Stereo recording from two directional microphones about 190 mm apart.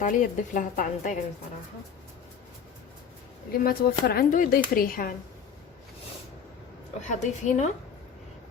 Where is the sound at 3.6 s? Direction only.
50° left (ahead or behind).